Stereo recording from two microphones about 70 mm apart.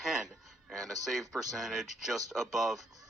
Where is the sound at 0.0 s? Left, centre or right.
Centre.